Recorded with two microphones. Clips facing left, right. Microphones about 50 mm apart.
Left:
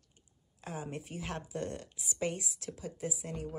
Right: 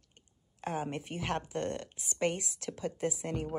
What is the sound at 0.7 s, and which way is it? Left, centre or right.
Speech, right.